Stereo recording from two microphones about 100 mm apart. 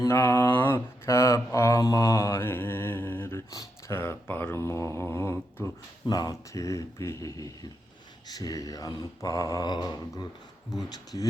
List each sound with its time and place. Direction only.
0.0 s a sound: 25° left (ahead or behind)
3.9 s speech: 25° left (ahead or behind)
6.1 s speech: 40° left (ahead or behind)